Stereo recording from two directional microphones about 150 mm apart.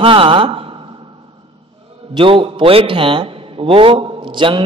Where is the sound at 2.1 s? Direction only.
35° right (ahead or behind).